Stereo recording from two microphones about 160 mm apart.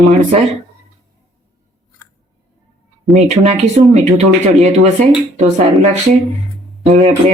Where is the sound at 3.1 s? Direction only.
45° right (ahead or behind).